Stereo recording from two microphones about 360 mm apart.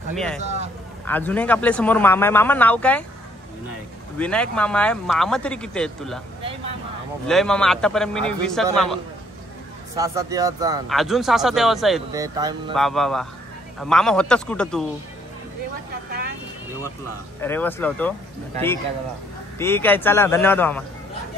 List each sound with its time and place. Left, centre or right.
0.1 s a man's voice: centre
0.4 s speech: centre
1.0 s a man's voice: centre
4.2 s a man's voice: centre
7.2 s a man's voice: centre
12.7 s a man's voice: centre
17.4 s a man's voice: centre
19.6 s a man's voice: centre